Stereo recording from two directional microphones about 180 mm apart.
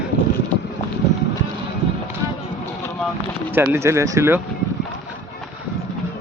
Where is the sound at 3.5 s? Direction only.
15° right (ahead or behind).